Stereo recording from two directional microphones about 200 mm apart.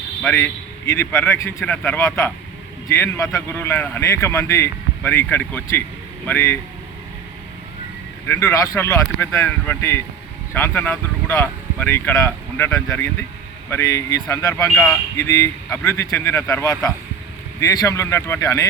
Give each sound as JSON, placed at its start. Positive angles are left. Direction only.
{"t": 0.2, "sound": "speech", "side_deg": 10}
{"t": 8.3, "sound": "speech", "side_deg": 10}